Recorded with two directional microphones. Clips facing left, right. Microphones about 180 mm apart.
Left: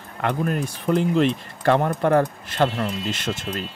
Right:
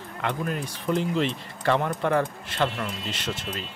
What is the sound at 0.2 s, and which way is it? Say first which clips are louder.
Speech: left 5 dB; 50° left (ahead or behind).